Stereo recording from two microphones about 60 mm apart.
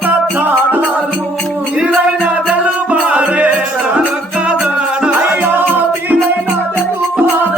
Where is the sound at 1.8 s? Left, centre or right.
Centre.